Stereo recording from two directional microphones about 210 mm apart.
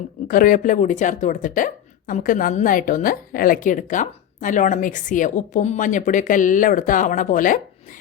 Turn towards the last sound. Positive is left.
turn(degrees=40)  # may be behind; listen again after turning